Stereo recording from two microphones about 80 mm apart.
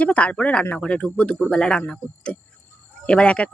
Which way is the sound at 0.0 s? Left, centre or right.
Centre.